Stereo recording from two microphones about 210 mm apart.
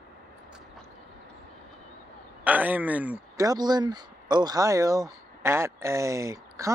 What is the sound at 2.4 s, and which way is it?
Speech, 10° right (ahead or behind).